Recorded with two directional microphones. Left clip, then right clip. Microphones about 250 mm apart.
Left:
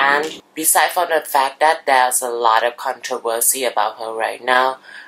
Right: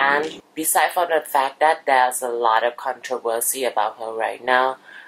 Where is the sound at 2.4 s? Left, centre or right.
Centre.